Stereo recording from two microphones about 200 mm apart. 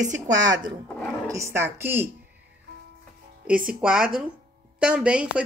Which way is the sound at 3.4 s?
5° right (ahead or behind).